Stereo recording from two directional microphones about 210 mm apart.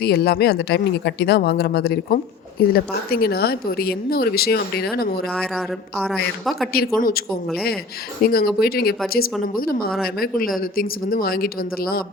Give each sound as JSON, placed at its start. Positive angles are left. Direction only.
{"t": 0.0, "sound": "speech", "side_deg": 50}
{"t": 5.3, "sound": "a woman's voice", "side_deg": 0}
{"t": 6.7, "sound": "speech", "side_deg": 45}
{"t": 8.2, "sound": "speech", "side_deg": 45}